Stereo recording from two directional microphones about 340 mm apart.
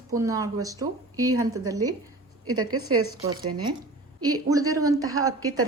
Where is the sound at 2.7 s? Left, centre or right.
Right.